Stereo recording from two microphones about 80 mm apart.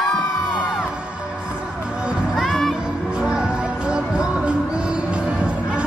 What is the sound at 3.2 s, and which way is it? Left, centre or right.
Music, centre.